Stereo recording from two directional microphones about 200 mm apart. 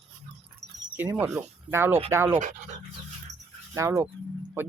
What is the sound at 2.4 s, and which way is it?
Speech, 40° right (ahead or behind).